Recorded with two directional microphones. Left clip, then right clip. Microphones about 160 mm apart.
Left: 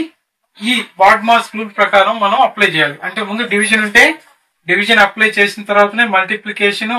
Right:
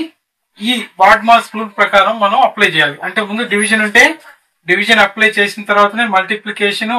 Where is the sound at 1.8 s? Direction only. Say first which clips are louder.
Even; 20° left (ahead or behind).